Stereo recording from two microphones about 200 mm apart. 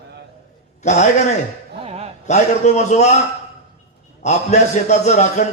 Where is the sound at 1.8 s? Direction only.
30° right (ahead or behind).